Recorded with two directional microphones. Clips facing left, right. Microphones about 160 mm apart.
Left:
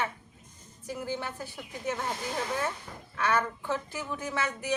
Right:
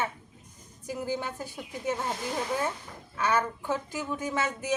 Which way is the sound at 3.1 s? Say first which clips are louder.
Right 1 dB; 10° right (ahead or behind).